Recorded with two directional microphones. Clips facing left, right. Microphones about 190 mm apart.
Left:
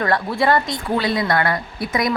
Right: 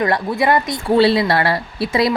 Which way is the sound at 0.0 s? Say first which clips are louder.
Right 2 dB; 20° right (ahead or behind).